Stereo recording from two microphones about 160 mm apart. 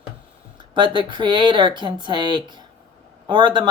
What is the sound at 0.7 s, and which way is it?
Speech, 30° right (ahead or behind).